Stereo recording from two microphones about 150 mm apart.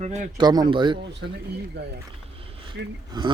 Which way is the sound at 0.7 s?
30° right (ahead or behind).